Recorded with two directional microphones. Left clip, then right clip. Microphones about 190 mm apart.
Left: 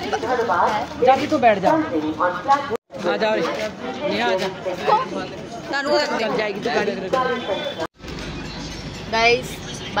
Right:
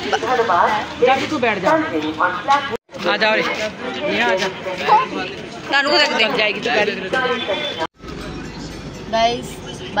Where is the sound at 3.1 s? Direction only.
35° left (ahead or behind).